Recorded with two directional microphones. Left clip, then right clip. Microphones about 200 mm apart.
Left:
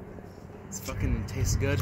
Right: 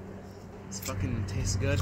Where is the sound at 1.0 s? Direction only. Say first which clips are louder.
Left 2 dB; 50° left (ahead or behind).